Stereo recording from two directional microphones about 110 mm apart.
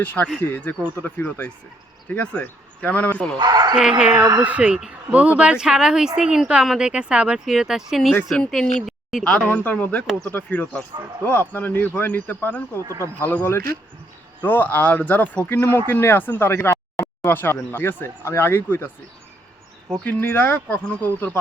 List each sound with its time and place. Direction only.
0.0 s speech: 15° left (ahead or behind)
3.3 s speech: 40° right (ahead or behind)
3.8 s a man's voice: 10° right (ahead or behind)
8.9 s a sound: centre (ahead or behind)
9.2 s speech: 10° left (ahead or behind)
12.8 s speech: 35° right (ahead or behind)
13.1 s speech: 15° left (ahead or behind)
20.1 s speech: 20° left (ahead or behind)